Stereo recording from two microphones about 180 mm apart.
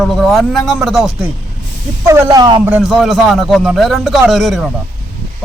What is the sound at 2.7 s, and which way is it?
Speech, 5° right (ahead or behind).